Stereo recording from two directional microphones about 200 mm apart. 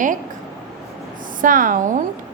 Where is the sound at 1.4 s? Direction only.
40° right (ahead or behind).